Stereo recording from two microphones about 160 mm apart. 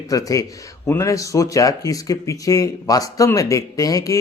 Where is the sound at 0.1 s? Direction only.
20° left (ahead or behind).